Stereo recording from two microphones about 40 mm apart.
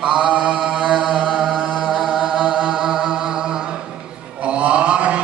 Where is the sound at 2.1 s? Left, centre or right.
Centre.